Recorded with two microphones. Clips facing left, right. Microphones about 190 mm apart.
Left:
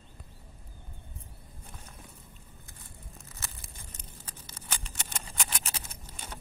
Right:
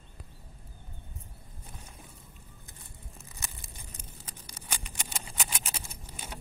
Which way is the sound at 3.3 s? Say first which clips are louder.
Right 1 dB; 15° right (ahead or behind).